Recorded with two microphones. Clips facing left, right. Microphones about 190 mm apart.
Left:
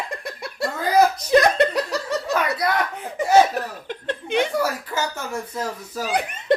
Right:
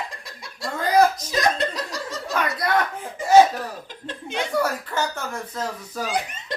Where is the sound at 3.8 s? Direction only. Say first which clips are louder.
Left 7 dB; 65° left (ahead or behind).